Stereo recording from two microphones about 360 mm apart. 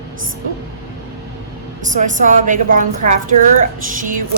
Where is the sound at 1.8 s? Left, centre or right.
Right.